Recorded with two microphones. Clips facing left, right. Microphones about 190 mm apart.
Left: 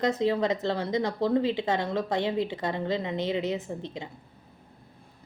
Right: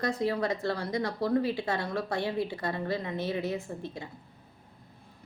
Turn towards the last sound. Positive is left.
turn(degrees=20)  # may be behind; listen again after turning